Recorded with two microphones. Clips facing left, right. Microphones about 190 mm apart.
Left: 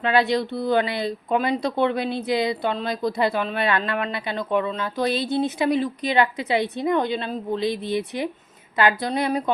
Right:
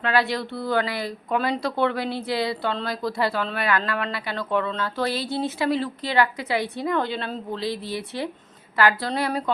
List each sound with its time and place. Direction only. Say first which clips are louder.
0.0 s speech: left 3 dB; 20° left (ahead or behind)